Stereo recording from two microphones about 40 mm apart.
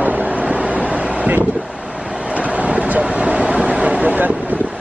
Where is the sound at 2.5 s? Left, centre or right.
Right.